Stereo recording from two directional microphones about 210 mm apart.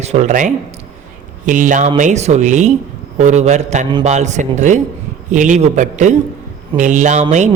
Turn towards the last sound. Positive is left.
turn(degrees=-35)  # may be behind; listen again after turning